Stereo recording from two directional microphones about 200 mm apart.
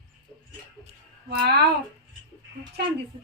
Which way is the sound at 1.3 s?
55° right (ahead or behind).